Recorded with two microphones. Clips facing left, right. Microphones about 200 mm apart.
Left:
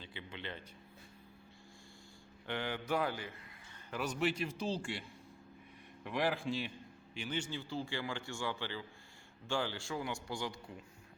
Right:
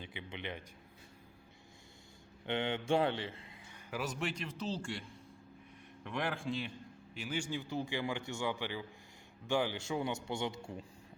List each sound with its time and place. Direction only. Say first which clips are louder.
0.0 s a man's voice: right 2 dB; 15° right (ahead or behind)
2.5 s a man's voice: right 4 dB; 25° right (ahead or behind)
3.7 s a man's voice: even; 5° right (ahead or behind)
6.1 s a man's voice: left 2 dB; centre (ahead or behind); by 10.8 s 25° right (ahead or behind)